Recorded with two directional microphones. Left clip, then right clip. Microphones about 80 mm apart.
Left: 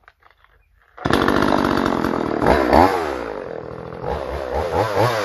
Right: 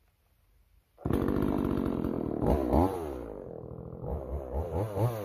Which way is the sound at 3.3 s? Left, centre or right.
Centre.